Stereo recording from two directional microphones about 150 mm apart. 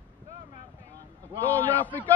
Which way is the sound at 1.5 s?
10° left (ahead or behind).